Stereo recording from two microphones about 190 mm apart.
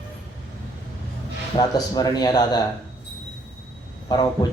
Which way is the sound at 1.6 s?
20° left (ahead or behind).